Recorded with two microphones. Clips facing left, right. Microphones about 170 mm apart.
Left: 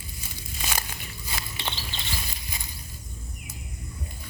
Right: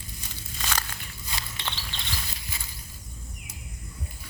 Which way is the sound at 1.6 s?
10° left (ahead or behind).